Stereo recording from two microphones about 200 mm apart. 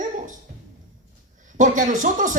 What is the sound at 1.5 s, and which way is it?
Speech, 40° right (ahead or behind).